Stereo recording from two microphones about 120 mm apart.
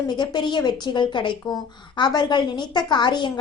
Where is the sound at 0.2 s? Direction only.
40° left (ahead or behind).